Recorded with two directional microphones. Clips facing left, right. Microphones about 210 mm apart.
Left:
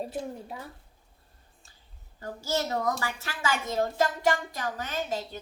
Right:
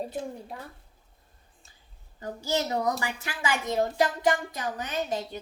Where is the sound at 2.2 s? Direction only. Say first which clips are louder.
Right 1 dB; 15° right (ahead or behind).